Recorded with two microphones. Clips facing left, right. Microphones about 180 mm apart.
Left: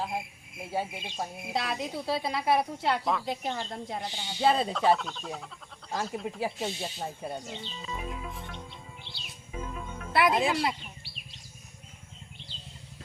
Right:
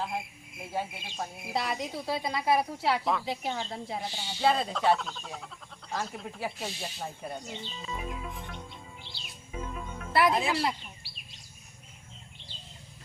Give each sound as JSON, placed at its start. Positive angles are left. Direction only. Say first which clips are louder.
{"t": 0.0, "sound": "cricket", "louder": "left 1 dB", "side_deg": 0}
{"t": 1.2, "sound": "a woman's voice", "louder": "even", "side_deg": 0}
{"t": 6.4, "sound": "speech", "louder": "left 2 dB", "side_deg": 20}
{"t": 7.3, "sound": "a woman's voice", "louder": "left 1 dB", "side_deg": 0}
{"t": 9.5, "sound": "music", "louder": "even", "side_deg": 0}